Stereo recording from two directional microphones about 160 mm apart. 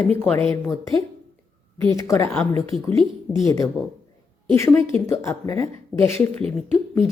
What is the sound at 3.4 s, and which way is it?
A woman's voice, 20° left (ahead or behind).